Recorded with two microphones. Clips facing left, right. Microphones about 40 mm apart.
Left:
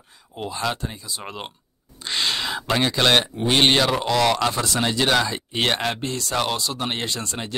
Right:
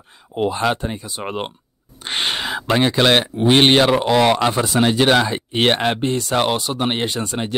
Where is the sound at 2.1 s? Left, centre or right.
Right.